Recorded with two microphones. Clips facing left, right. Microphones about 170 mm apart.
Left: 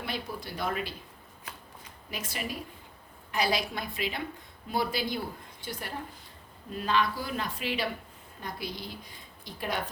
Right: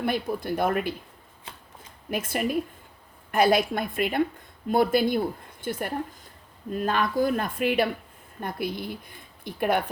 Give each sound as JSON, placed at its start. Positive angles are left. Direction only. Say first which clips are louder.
{"t": 0.0, "sound": "speech", "louder": "right 9 dB", "side_deg": -55}
{"t": 1.5, "sound": "shuffling cards", "louder": "right 1 dB", "side_deg": -25}
{"t": 2.0, "sound": "speech", "louder": "right 10 dB", "side_deg": -55}